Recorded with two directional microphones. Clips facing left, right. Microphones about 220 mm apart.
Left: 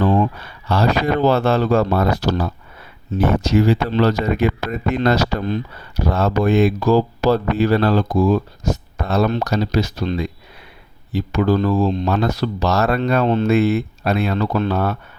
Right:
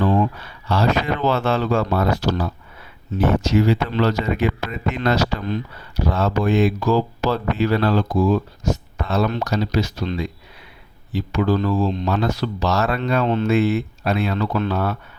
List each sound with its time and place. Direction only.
0.0 s a sound: 40° left (ahead or behind)
0.7 s speech: 40° left (ahead or behind)
13.7 s speech: 50° left (ahead or behind)